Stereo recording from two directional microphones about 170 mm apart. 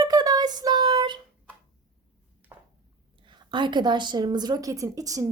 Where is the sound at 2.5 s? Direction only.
15° right (ahead or behind).